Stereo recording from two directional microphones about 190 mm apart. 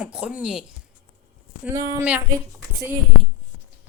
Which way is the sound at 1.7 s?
15° right (ahead or behind).